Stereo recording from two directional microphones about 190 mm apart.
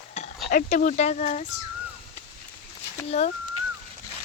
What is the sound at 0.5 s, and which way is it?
Speech, 45° left (ahead or behind).